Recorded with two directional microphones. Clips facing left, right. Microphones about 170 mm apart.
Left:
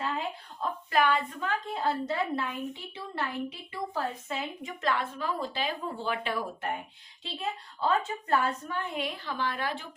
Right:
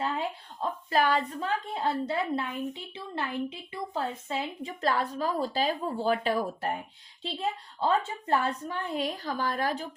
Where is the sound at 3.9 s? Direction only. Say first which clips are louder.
Right 3 dB; 30° right (ahead or behind).